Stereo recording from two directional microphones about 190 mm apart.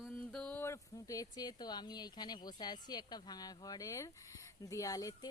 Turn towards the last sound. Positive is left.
turn(degrees=20)  # may be behind; listen again after turning